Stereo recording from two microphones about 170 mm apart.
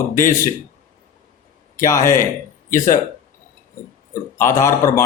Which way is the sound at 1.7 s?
20° left (ahead or behind).